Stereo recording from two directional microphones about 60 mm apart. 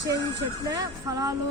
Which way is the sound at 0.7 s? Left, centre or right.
Right.